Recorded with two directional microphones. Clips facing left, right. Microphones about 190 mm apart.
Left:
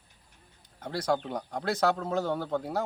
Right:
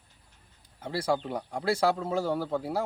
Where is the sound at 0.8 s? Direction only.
5° right (ahead or behind).